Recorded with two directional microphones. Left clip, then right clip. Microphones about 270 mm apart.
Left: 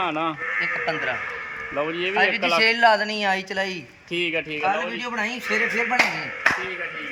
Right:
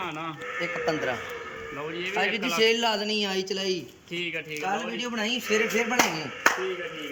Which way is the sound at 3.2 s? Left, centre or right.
Left.